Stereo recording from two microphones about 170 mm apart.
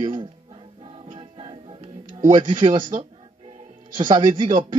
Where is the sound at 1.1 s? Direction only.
30° right (ahead or behind).